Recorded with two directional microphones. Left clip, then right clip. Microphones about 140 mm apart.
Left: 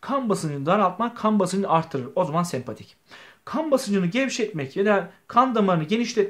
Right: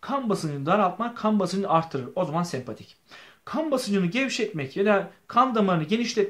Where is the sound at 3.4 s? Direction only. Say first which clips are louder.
Left 3 dB; 30° left (ahead or behind).